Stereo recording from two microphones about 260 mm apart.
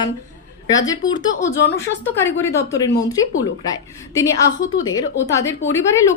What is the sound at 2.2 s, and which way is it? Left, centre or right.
Speech, centre.